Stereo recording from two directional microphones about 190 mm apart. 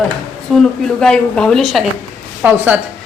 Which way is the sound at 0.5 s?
5° left (ahead or behind).